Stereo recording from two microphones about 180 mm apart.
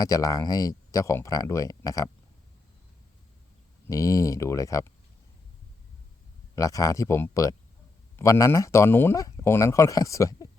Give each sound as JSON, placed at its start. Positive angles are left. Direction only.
{"t": 0.0, "sound": "speech", "side_deg": 20}
{"t": 3.8, "sound": "speech", "side_deg": 15}
{"t": 6.6, "sound": "speech", "side_deg": 20}